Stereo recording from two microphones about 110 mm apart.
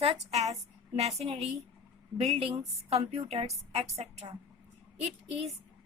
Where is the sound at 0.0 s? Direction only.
75° right (ahead or behind).